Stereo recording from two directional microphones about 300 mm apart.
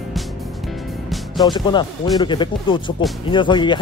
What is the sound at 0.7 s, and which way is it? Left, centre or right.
Music, centre.